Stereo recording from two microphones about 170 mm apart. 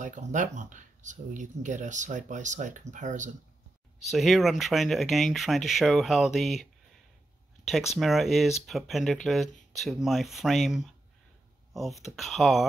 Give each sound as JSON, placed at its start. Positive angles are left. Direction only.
{"t": 0.0, "sound": "speech", "side_deg": -45}
{"t": 4.1, "sound": "speech", "side_deg": 0}